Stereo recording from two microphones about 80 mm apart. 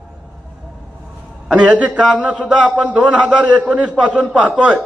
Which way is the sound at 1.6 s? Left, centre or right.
Centre.